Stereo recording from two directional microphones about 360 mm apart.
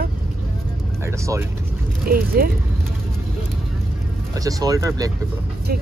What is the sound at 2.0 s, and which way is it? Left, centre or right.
Speech, right.